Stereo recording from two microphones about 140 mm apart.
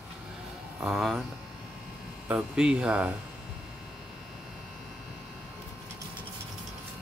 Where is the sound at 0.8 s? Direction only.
Centre (ahead or behind).